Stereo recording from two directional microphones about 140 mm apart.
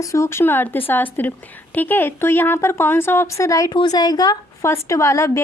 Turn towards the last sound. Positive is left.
turn(degrees=20)  # may be behind; listen again after turning